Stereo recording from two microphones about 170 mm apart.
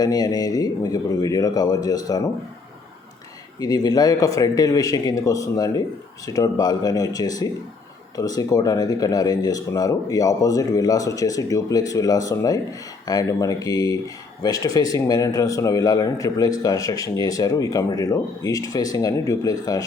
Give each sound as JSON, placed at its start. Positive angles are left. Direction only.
{"t": 0.0, "sound": "speech", "side_deg": 25}
{"t": 3.6, "sound": "speech", "side_deg": 25}